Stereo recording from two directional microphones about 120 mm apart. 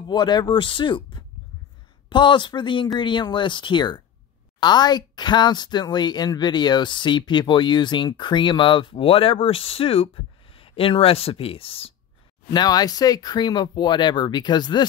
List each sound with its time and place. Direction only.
0.0 s speech: 40° left (ahead or behind)
12.4 s speech: 35° left (ahead or behind)